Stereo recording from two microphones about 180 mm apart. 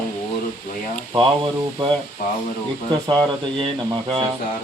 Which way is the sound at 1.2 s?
25° right (ahead or behind).